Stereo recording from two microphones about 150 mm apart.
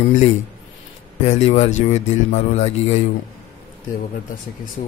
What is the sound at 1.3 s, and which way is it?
Speech, 50° left (ahead or behind).